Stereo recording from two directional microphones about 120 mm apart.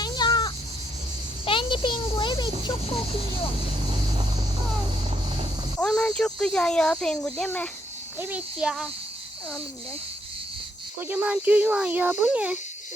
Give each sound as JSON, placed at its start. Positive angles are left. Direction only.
{"t": 0.0, "sound": "crow", "side_deg": 35}
{"t": 1.5, "sound": "a sound", "side_deg": 45}
{"t": 3.8, "sound": "vehicle", "side_deg": -40}
{"t": 5.8, "sound": "speech", "side_deg": 5}
{"t": 8.2, "sound": "speech", "side_deg": -10}
{"t": 11.1, "sound": "speech", "side_deg": -15}